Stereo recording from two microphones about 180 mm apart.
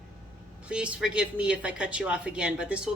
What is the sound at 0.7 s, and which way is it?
A woman's voice, 5° right (ahead or behind).